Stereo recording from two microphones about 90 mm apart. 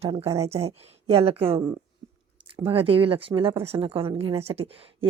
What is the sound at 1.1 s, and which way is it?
Speech, 90° right.